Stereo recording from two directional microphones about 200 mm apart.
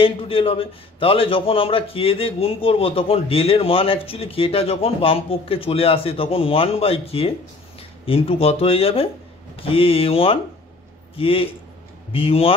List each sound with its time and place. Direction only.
0.0 s speech: 25° left (ahead or behind)